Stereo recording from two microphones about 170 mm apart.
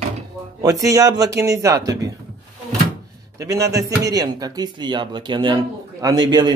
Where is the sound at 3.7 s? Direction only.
20° right (ahead or behind).